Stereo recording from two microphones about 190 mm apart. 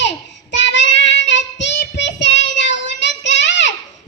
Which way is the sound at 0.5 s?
70° left (ahead or behind).